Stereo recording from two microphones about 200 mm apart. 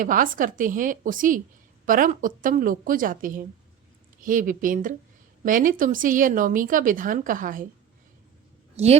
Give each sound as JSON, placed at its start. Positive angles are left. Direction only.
{"t": 0.0, "sound": "a woman's voice", "side_deg": -45}